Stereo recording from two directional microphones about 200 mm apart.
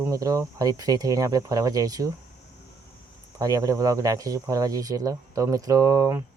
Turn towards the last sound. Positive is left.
turn(degrees=-15)  # may be behind; listen again after turning